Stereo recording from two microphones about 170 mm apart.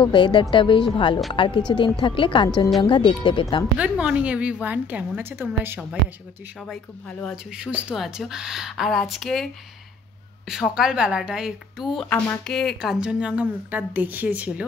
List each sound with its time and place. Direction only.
0.0 s speech: 30° left (ahead or behind)
3.7 s a woman's voice: 5° right (ahead or behind)
6.7 s speech: 5° left (ahead or behind)
7.5 s a woman's voice: 5° right (ahead or behind)
10.5 s a woman's voice: 5° right (ahead or behind)